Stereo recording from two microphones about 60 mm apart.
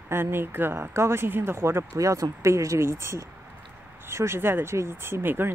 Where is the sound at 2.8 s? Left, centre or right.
Right.